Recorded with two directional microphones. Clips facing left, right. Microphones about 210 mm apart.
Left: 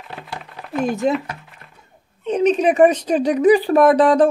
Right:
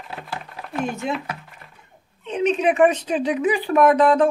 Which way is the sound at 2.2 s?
40° left (ahead or behind).